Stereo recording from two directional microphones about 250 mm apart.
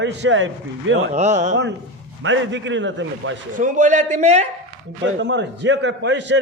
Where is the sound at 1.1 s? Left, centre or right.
Right.